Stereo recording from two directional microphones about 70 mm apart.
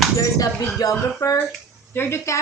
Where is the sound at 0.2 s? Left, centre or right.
Left.